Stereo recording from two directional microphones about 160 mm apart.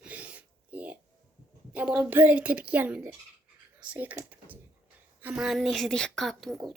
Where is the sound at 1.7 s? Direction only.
10° right (ahead or behind).